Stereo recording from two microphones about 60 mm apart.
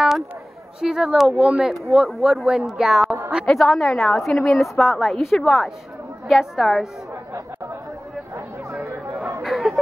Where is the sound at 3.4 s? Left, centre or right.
Centre.